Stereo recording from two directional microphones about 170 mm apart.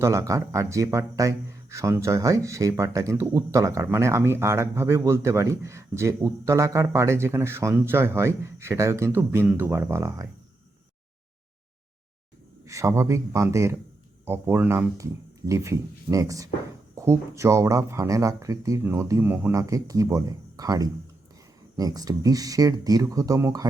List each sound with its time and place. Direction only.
0.0 s speech: 20° right (ahead or behind)
12.6 s speech: 15° right (ahead or behind)